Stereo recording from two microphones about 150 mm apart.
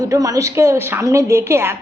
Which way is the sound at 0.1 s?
20° right (ahead or behind).